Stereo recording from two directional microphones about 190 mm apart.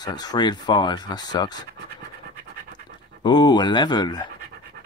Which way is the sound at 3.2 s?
20° left (ahead or behind).